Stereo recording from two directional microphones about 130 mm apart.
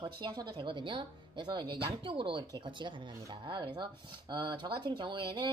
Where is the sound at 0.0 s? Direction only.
30° right (ahead or behind).